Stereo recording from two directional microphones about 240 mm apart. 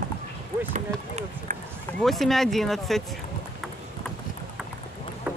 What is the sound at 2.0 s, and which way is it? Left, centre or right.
Speech, centre.